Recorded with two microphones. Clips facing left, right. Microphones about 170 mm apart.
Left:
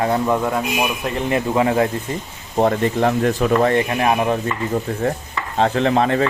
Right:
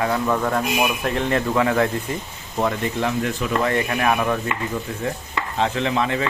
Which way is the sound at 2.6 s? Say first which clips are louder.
Left 6 dB; 45° left (ahead or behind).